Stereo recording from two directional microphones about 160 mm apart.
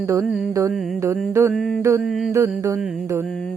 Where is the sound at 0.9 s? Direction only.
15° right (ahead or behind).